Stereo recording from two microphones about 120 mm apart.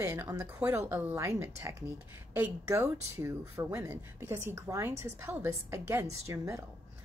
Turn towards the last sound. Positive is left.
turn(degrees=-25)  # may be behind; listen again after turning